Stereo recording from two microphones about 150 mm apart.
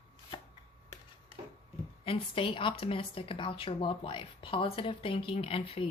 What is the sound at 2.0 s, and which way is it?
A woman's voice, 35° left (ahead or behind).